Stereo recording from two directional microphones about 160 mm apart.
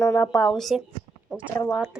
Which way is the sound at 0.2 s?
5° left (ahead or behind).